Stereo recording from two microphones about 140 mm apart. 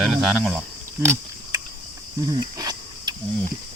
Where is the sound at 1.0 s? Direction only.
20° right (ahead or behind).